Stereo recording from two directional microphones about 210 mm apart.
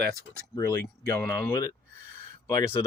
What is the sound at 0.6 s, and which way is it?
Speech, 15° left (ahead or behind).